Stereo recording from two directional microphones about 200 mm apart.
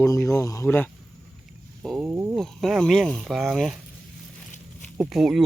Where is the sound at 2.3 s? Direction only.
Centre (ahead or behind).